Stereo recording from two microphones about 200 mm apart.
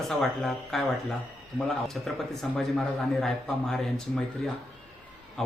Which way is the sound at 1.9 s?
Centre (ahead or behind).